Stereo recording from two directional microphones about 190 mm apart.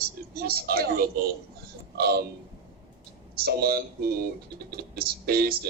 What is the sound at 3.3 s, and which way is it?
Speech, 55° right (ahead or behind).